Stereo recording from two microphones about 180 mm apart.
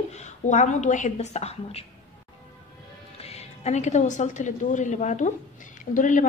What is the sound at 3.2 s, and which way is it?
A woman's voice, 35° left (ahead or behind).